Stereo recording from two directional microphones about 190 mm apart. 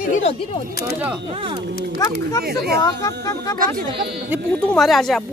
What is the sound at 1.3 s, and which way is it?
Speech, 30° right (ahead or behind).